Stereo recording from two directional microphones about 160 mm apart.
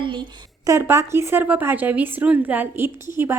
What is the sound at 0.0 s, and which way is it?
A woman's voice, 30° right (ahead or behind).